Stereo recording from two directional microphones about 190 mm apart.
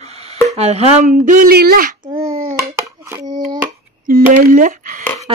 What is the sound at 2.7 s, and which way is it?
Hands, 15° right (ahead or behind).